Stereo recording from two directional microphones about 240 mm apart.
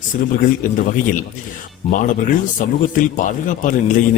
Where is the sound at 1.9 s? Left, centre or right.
Left.